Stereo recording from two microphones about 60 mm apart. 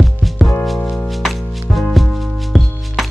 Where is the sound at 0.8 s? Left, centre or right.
Left.